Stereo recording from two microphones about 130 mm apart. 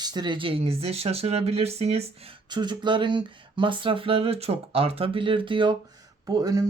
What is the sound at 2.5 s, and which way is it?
Speech, 35° right (ahead or behind).